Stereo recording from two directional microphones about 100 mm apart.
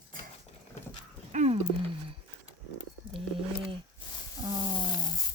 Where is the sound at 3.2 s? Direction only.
65° right (ahead or behind).